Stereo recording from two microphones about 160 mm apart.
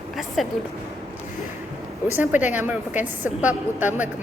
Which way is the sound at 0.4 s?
Centre (ahead or behind).